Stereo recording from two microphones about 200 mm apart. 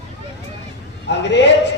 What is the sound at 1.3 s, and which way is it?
Speech, 60° left (ahead or behind).